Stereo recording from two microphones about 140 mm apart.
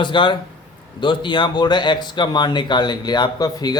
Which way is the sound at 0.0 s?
35° left (ahead or behind).